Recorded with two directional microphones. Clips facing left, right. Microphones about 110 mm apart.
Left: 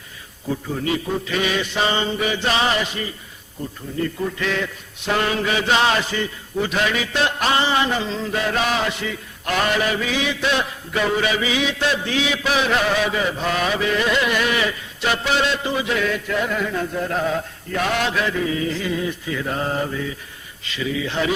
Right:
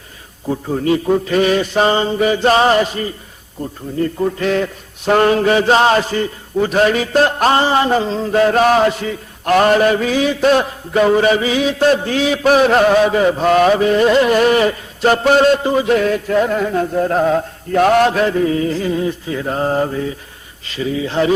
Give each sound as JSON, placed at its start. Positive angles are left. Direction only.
{"t": 0.4, "sound": "mantra", "side_deg": -40}